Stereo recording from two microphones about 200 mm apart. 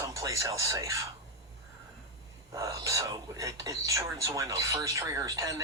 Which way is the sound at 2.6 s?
15° right (ahead or behind).